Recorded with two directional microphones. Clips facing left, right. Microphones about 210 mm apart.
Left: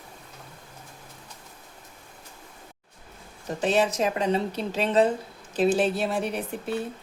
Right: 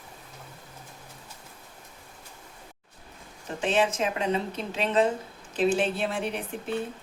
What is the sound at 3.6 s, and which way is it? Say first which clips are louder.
A woman's voice: left 2 dB; 40° left (ahead or behind).